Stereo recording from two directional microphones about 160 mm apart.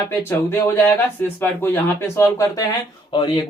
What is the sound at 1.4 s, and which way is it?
Speech, 15° left (ahead or behind).